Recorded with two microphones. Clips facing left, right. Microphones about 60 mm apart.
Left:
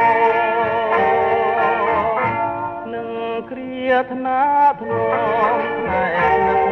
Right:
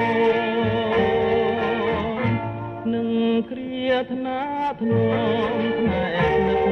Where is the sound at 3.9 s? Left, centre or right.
Left.